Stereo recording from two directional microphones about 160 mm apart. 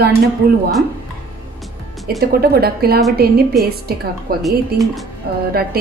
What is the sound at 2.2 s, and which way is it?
A woman's voice, 75° right (ahead or behind).